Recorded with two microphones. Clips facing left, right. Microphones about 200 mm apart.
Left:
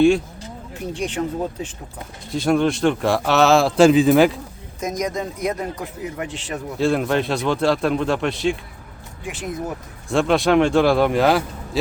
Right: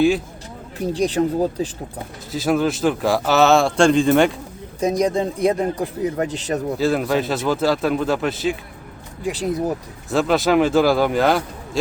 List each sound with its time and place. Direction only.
0.9 s speech: 35° right (ahead or behind)
2.3 s speech: 5° right (ahead or behind)
4.8 s speech: 30° right (ahead or behind)
6.7 s speech: centre (ahead or behind)
9.2 s speech: 35° right (ahead or behind)
10.1 s speech: centre (ahead or behind)